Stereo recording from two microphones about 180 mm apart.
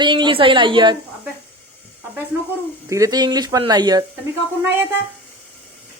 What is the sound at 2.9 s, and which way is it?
A woman's voice, 20° right (ahead or behind).